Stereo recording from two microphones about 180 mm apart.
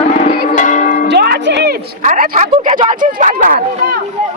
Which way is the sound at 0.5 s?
45° left (ahead or behind).